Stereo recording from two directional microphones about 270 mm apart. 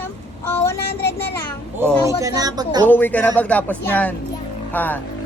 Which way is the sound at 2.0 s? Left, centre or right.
Centre.